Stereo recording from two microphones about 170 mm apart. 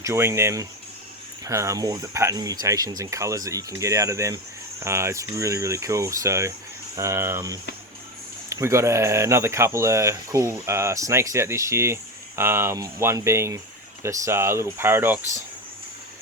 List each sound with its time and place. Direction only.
0.0 s speech: 15° right (ahead or behind)